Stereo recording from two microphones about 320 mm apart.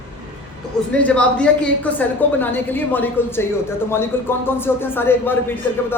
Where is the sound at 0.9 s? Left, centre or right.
Centre.